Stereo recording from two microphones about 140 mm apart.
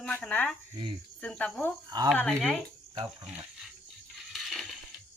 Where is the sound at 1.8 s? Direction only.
30° right (ahead or behind).